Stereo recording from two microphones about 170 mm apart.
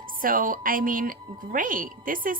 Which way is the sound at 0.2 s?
55° right (ahead or behind).